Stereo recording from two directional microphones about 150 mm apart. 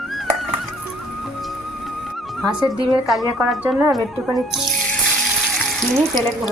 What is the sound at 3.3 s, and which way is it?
Speech, 5° right (ahead or behind).